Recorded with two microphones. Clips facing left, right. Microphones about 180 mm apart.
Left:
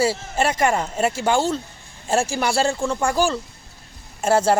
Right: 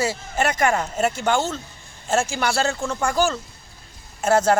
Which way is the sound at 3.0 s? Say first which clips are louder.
Right 1 dB; 10° left (ahead or behind).